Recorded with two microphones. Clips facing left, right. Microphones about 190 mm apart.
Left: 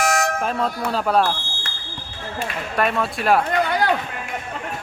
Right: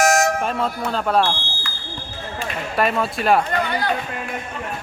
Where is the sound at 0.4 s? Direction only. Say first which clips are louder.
Even; centre (ahead or behind).